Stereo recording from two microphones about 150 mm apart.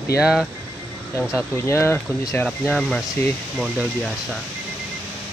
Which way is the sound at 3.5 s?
Centre (ahead or behind).